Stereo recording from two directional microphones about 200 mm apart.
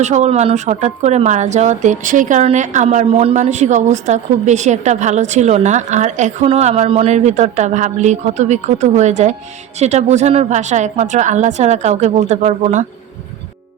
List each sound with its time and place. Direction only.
0.0 s speech: 35° right (ahead or behind)